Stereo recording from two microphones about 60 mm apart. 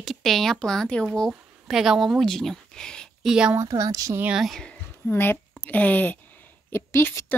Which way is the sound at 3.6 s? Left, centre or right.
Right.